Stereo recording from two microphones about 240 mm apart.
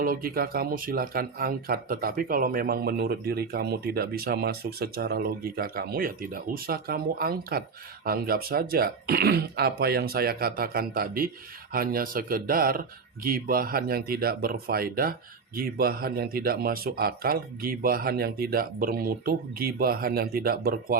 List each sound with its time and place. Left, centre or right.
0.0 s speech: right